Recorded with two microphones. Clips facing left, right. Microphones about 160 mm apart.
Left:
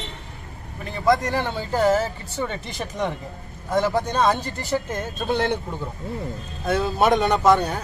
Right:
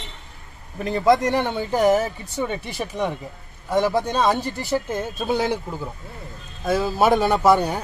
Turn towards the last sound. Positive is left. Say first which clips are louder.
# right 1 dB
turn(degrees=-10)  # may be behind; listen again after turning